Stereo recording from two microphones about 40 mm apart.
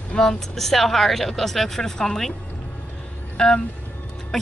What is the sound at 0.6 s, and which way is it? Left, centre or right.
Speech, centre.